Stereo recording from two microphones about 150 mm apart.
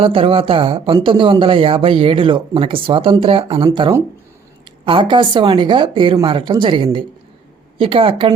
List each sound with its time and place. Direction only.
0.0 s speech: 35° right (ahead or behind)